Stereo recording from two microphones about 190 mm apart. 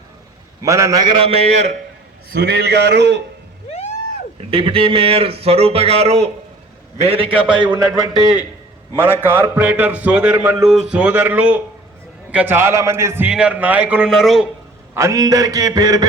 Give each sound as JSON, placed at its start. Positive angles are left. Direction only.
{"t": 0.6, "sound": "a man's voice", "side_deg": -15}
{"t": 1.1, "sound": "speech", "side_deg": -30}
{"t": 2.3, "sound": "a man's voice", "side_deg": -60}
{"t": 4.4, "sound": "a man's voice", "side_deg": -30}
{"t": 8.1, "sound": "a man's voice", "side_deg": -5}
{"t": 14.9, "sound": "a man's voice", "side_deg": -15}